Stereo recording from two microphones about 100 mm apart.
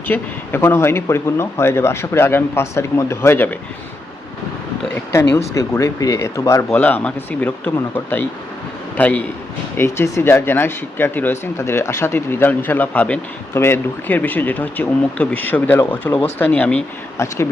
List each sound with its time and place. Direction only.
0.1 s speech: 20° left (ahead or behind)
5.1 s speech: 30° left (ahead or behind)
6.7 s a man's voice: 15° left (ahead or behind)
9.7 s speech: 25° left (ahead or behind)
17.2 s speech: 25° left (ahead or behind)